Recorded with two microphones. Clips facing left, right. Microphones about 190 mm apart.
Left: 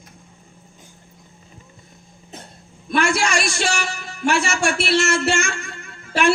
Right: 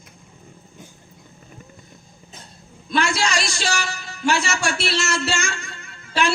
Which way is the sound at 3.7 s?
30° left (ahead or behind).